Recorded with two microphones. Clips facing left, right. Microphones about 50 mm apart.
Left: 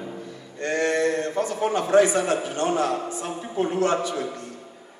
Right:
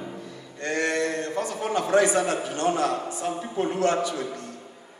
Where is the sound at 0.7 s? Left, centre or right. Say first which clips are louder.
Left 3 dB; centre.